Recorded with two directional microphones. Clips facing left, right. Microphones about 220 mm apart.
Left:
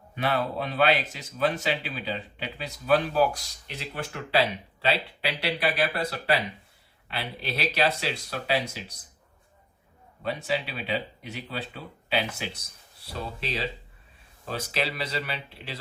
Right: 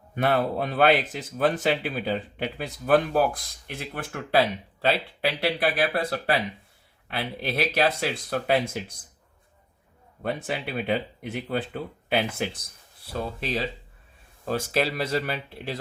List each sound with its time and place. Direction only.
0.2 s speech: 50° right (ahead or behind)
10.2 s speech: 55° right (ahead or behind)